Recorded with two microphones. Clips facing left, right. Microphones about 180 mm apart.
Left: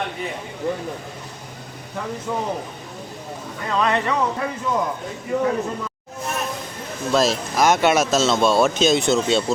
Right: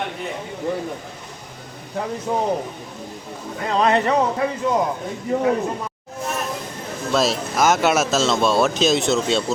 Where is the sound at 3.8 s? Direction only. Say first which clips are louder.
Right 3 dB; 35° right (ahead or behind).